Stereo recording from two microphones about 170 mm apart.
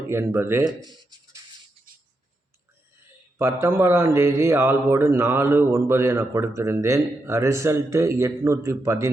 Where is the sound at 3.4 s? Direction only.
15° right (ahead or behind).